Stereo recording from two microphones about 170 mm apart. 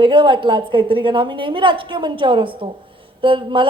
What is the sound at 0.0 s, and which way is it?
A woman's voice, 30° right (ahead or behind).